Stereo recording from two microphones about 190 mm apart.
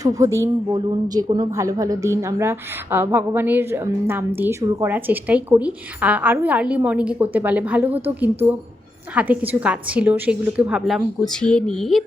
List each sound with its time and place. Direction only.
0.0 s a woman's voice: 15° right (ahead or behind)
9.1 s a woman's voice: 10° right (ahead or behind)